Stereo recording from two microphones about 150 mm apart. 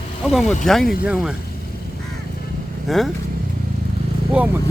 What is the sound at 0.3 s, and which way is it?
Speech, centre (ahead or behind).